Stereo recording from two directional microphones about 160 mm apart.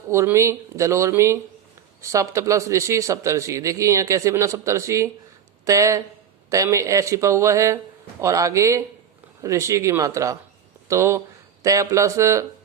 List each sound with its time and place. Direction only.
0.1 s a man's voice: 15° right (ahead or behind)